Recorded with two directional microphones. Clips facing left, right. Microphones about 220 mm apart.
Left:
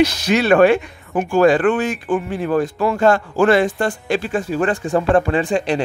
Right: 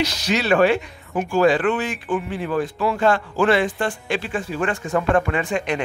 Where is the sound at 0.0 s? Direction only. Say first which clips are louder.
Left 6 dB; 55° left (ahead or behind).